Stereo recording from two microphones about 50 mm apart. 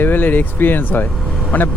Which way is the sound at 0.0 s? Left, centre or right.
Left.